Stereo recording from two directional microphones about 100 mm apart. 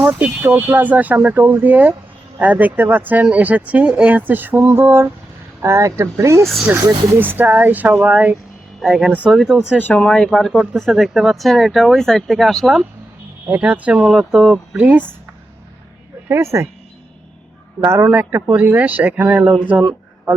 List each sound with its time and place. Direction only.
0.0 s speech: 10° right (ahead or behind)
9.8 s speech: 10° left (ahead or behind)
10.2 s speech: centre (ahead or behind)
13.6 s speech: 10° right (ahead or behind)
16.3 s speech: 25° right (ahead or behind)
17.7 s speech: 25° right (ahead or behind)